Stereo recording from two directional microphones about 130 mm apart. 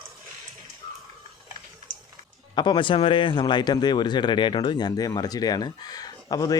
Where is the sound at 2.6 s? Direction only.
35° left (ahead or behind).